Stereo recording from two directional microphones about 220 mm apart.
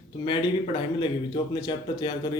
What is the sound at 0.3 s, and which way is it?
A man's voice, 25° left (ahead or behind).